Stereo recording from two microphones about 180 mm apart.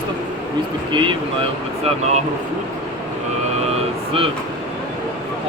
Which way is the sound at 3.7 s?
30° right (ahead or behind).